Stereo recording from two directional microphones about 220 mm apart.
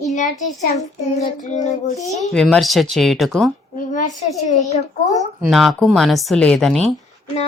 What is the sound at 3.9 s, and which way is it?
A child's voice, 35° left (ahead or behind).